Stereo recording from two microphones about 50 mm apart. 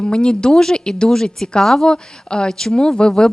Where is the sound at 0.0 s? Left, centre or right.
Centre.